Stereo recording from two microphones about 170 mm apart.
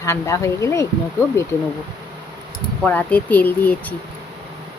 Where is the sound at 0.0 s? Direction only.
15° left (ahead or behind).